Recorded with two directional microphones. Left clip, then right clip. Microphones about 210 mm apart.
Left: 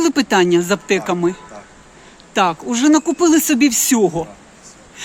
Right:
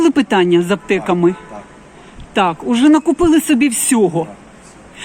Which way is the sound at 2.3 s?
5° left (ahead or behind).